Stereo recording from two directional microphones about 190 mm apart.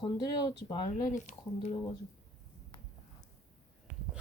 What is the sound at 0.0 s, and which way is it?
Speech, 25° left (ahead or behind).